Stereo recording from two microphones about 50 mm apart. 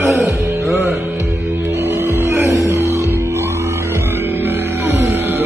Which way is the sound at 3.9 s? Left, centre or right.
Right.